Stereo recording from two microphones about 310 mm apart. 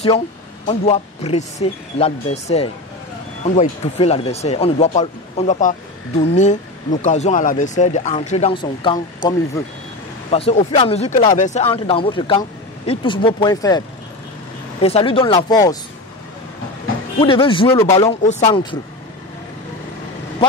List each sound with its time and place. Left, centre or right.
0.7 s speech: centre
10.3 s speech: centre
17.2 s speech: centre
18.2 s speech: left